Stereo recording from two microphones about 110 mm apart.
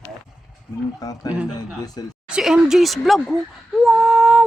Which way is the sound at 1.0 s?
35° left (ahead or behind).